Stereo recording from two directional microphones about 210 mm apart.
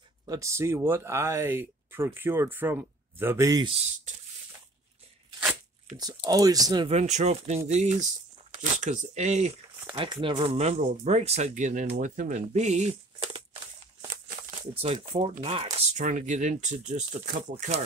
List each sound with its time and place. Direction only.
0.3 s speech: 15° right (ahead or behind)
5.9 s speech: 20° right (ahead or behind)
9.8 s a sound: 20° right (ahead or behind)
10.2 s speech: 25° right (ahead or behind)
14.7 s speech: 30° right (ahead or behind)